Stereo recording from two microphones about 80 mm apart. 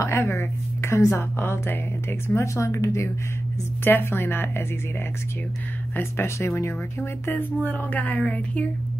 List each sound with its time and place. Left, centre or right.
0.0 s a woman's voice: left
3.8 s a woman's voice: left
5.9 s a woman's voice: left
7.2 s a woman's voice: left